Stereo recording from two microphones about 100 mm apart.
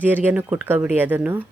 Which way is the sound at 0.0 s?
20° right (ahead or behind).